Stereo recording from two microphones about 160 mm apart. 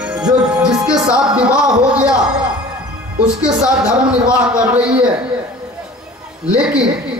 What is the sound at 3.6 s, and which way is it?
A man's voice, 5° right (ahead or behind).